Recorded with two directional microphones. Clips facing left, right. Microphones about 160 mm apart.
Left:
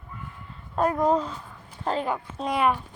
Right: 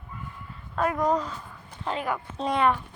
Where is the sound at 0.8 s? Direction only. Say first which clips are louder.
Left 2 dB; 30° left (ahead or behind).